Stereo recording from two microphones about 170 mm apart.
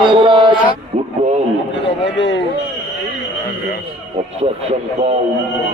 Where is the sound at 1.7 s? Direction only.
90° left.